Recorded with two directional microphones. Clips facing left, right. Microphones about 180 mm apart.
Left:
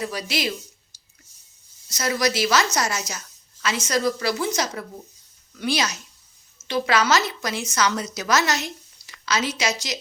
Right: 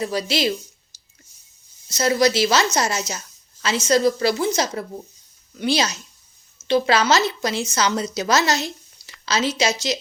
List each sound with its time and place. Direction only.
0.0 s speech: 30° right (ahead or behind)
0.9 s a sound: 25° right (ahead or behind)
1.9 s speech: 25° right (ahead or behind)